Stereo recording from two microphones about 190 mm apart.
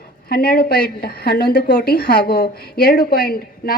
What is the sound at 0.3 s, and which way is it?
A woman's voice, 50° left (ahead or behind).